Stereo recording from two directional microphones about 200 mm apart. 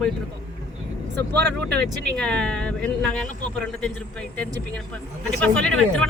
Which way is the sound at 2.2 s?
5° left (ahead or behind).